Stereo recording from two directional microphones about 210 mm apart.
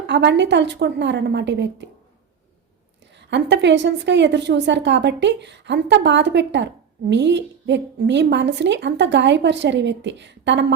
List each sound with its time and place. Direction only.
0.1 s a woman's voice: 55° right (ahead or behind)
3.2 s a woman's voice: 55° right (ahead or behind)